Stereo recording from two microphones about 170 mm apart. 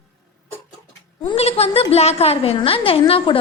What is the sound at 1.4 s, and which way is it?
A woman's voice, 35° left (ahead or behind).